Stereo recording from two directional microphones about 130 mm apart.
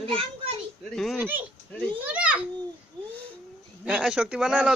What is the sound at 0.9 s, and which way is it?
Speech, centre (ahead or behind).